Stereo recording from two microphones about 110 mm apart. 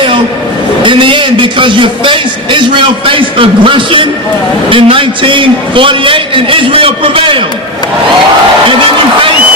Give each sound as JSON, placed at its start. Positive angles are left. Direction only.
{"t": 0.8, "sound": "a man's voice", "side_deg": -45}